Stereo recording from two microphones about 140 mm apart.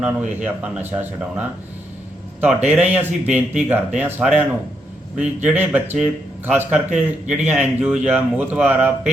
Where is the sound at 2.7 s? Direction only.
10° right (ahead or behind).